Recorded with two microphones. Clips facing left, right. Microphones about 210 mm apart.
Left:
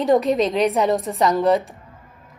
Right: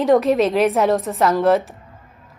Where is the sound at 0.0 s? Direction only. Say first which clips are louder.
Right 2 dB; centre (ahead or behind).